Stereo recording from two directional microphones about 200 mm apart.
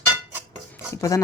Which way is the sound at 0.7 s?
15° left (ahead or behind).